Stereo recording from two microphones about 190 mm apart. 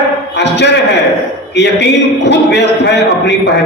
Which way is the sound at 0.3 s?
65° left (ahead or behind).